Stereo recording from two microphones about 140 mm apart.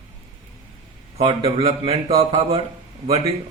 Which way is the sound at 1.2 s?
45° right (ahead or behind).